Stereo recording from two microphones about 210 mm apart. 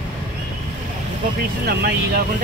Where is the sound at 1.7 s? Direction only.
50° right (ahead or behind).